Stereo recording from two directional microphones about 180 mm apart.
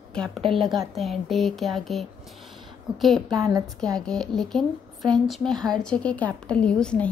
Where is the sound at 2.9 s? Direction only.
25° right (ahead or behind).